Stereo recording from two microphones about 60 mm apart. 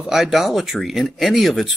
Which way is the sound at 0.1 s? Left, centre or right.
Centre.